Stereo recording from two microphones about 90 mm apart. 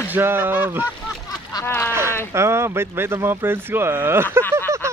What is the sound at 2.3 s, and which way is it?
Speech, 30° right (ahead or behind).